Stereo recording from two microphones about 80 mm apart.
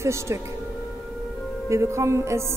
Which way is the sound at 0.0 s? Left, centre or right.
Right.